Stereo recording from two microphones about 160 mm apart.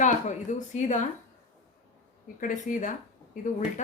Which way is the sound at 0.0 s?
50° left (ahead or behind).